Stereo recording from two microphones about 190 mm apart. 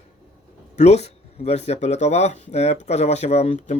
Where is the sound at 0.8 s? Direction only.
35° left (ahead or behind).